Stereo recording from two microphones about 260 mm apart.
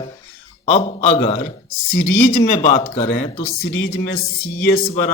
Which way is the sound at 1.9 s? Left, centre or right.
Left.